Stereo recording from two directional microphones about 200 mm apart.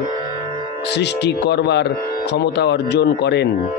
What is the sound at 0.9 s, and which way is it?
Speech, 60° left (ahead or behind).